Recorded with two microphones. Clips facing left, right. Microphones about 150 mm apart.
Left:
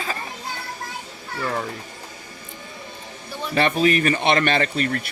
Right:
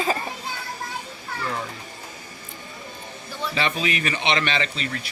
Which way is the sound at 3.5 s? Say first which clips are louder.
Left 7 dB; 50° left (ahead or behind).